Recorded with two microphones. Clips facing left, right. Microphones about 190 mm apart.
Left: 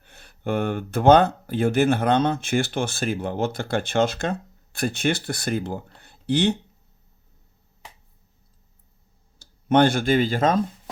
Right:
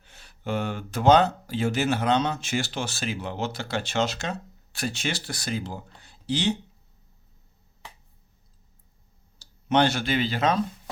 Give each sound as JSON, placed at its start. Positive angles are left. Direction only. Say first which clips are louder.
{"t": 0.0, "sound": "speech", "louder": "left 5 dB", "side_deg": 55}
{"t": 9.4, "sound": "speech", "louder": "left 4 dB", "side_deg": 50}